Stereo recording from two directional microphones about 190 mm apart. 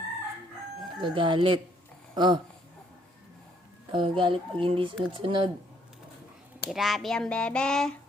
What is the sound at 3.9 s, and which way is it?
Speech, 25° right (ahead or behind).